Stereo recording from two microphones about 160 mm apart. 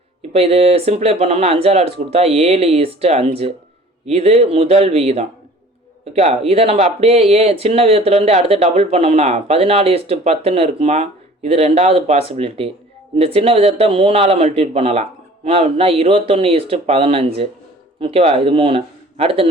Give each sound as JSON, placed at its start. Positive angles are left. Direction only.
{"t": 0.2, "sound": "speech", "side_deg": -40}